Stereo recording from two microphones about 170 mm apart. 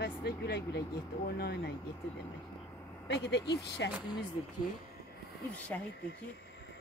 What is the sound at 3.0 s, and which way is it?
Speech, 90° left.